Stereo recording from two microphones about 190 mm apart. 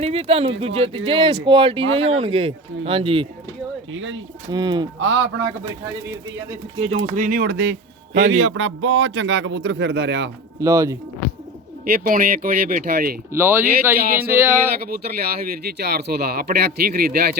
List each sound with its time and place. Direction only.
0.0 s speech: 30° right (ahead or behind)
3.9 s speech: 90° right
4.5 s speech: 25° right (ahead or behind)
4.9 s a man's voice: 80° right
6.7 s speech: 35° right (ahead or behind); by 8.2 s 60° right (ahead or behind)
8.3 s a man's voice: 85° right; by 10.3 s 65° right (ahead or behind)
10.6 s speech: 15° right (ahead or behind)
11.9 s speech: 50° right (ahead or behind)
13.3 s speech: 10° right (ahead or behind)
15.6 s speech: 60° right (ahead or behind)